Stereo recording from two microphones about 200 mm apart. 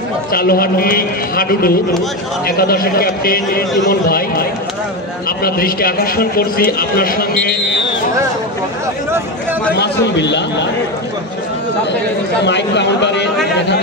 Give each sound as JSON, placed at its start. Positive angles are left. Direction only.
{"t": 0.3, "sound": "a man's voice", "side_deg": 50}
{"t": 9.8, "sound": "a man's voice", "side_deg": 60}
{"t": 12.4, "sound": "a man's voice", "side_deg": 60}